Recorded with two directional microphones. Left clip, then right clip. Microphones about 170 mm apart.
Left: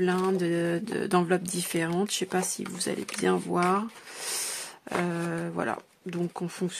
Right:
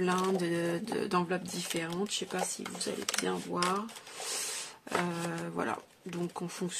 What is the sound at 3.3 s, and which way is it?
Speech, 55° left (ahead or behind).